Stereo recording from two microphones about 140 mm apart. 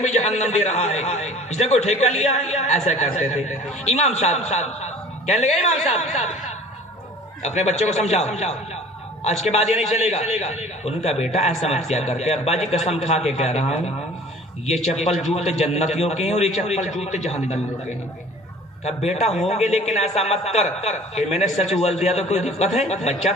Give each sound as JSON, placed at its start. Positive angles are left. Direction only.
{"t": 0.0, "sound": "a man's voice", "side_deg": 55}
{"t": 7.4, "sound": "a man's voice", "side_deg": 55}
{"t": 14.7, "sound": "a man's voice", "side_deg": 55}
{"t": 19.2, "sound": "a man's voice", "side_deg": 50}